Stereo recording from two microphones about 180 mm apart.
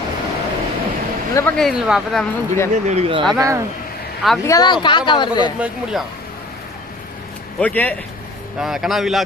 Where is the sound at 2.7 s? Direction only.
40° right (ahead or behind).